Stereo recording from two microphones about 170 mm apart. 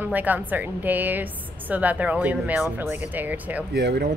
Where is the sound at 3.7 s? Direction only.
70° right (ahead or behind).